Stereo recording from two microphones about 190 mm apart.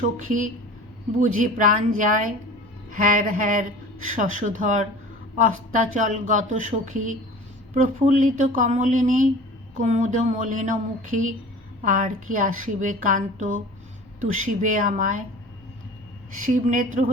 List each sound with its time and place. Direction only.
0.0 s a woman's voice: 40° right (ahead or behind)
5.9 s a woman's voice: 40° right (ahead or behind)
16.4 s speech: 40° right (ahead or behind)